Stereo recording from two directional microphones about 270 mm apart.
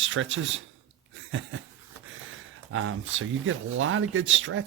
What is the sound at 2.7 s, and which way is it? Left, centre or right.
Speech, right.